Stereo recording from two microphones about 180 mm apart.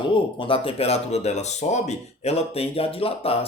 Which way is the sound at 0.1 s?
30° left (ahead or behind).